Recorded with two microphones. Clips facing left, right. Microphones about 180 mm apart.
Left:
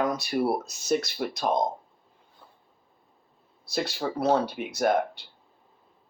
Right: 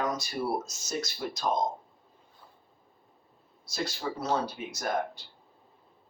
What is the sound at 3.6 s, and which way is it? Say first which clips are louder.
Speech: left 4 dB; 65° left (ahead or behind).